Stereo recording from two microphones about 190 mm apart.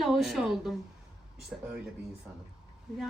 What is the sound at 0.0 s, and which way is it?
Speech, centre (ahead or behind).